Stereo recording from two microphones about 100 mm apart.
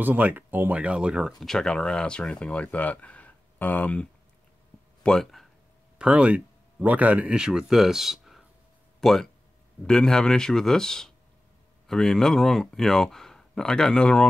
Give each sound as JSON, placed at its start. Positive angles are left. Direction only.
{"t": 0.0, "sound": "speech", "side_deg": -20}
{"t": 5.9, "sound": "speech", "side_deg": -10}